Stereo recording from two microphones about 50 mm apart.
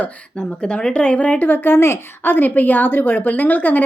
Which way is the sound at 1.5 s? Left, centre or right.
Left.